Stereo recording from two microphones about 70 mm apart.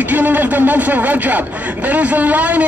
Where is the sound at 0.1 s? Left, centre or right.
Right.